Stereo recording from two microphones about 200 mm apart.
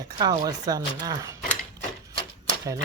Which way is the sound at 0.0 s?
20° right (ahead or behind).